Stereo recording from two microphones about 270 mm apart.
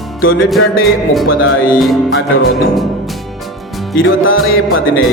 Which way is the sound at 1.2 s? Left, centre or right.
Left.